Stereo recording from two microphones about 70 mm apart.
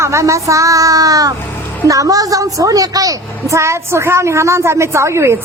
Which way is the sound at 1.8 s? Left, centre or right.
Right.